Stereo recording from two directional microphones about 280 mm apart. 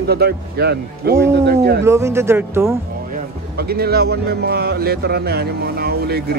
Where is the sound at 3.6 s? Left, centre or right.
Right.